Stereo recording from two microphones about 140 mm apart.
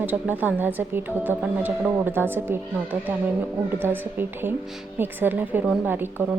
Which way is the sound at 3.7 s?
15° right (ahead or behind).